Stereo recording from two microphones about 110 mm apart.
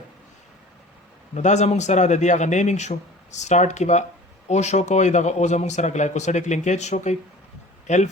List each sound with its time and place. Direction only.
1.3 s speech: 90° left